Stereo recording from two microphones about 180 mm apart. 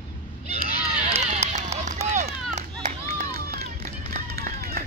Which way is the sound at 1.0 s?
35° right (ahead or behind).